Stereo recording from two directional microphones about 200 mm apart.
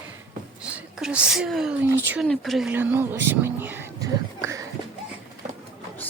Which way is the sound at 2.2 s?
Centre (ahead or behind).